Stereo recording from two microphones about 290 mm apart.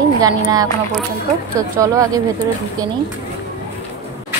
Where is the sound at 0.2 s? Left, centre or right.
Centre.